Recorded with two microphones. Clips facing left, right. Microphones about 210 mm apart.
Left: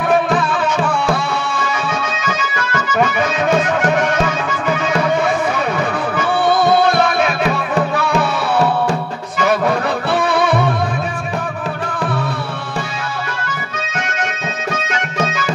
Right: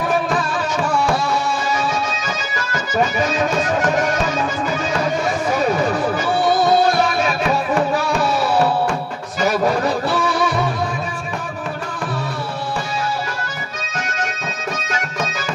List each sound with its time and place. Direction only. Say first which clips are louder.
0.4 s music: left 4 dB; 40° right (ahead or behind)
2.2 s music: left 4 dB; 40° right (ahead or behind)